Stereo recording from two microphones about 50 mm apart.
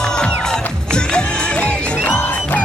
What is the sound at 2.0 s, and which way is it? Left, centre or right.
Music, left.